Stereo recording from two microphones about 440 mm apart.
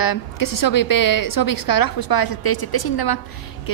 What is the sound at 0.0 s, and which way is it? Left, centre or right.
A woman's voice, left.